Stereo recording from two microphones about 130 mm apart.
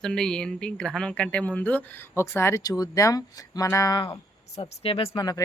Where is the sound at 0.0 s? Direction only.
5° left (ahead or behind); by 4.2 s 30° left (ahead or behind).